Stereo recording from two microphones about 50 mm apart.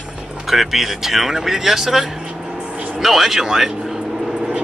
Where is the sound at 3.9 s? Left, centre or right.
Centre.